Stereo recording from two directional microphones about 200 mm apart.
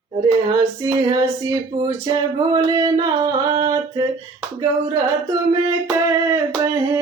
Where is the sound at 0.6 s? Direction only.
15° right (ahead or behind).